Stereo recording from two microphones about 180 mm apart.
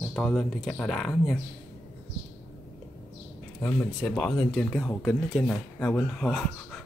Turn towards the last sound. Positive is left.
turn(degrees=5)  # may be behind; listen again after turning